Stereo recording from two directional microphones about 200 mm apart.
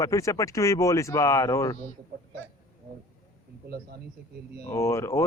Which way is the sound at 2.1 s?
55° right (ahead or behind).